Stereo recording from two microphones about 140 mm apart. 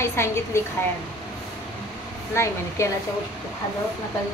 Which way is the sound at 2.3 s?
20° left (ahead or behind).